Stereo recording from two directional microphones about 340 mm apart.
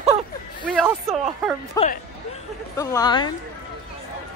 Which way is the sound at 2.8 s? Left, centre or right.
Centre.